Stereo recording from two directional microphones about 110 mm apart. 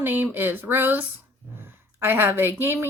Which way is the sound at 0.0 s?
20° right (ahead or behind).